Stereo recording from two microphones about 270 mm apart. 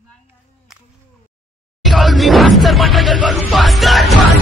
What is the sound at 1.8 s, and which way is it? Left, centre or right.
Music, centre.